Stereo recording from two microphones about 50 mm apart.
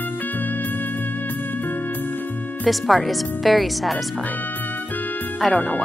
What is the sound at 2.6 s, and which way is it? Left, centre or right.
Speech, centre.